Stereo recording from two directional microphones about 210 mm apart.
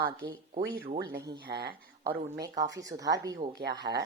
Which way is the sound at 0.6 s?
50° right (ahead or behind).